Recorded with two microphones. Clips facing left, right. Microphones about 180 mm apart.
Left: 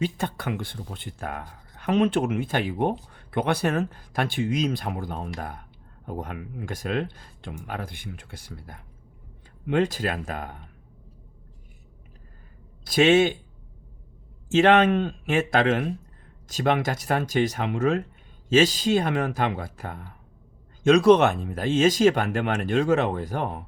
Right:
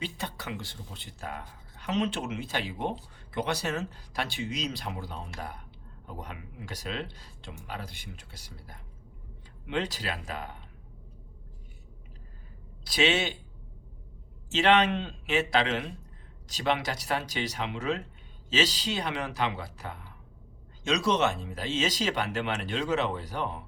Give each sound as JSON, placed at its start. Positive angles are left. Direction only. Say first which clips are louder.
{"t": 0.0, "sound": "speech", "louder": "left 9 dB", "side_deg": 50}
{"t": 12.8, "sound": "speech", "louder": "left 9 dB", "side_deg": 50}
{"t": 14.5, "sound": "speech", "louder": "left 6 dB", "side_deg": 50}